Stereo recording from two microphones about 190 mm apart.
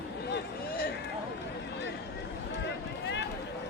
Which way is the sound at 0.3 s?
50° left (ahead or behind).